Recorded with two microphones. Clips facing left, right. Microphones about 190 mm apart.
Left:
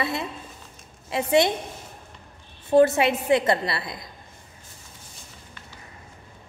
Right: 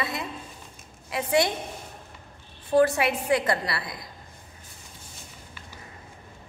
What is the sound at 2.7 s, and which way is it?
A woman's voice, 25° left (ahead or behind).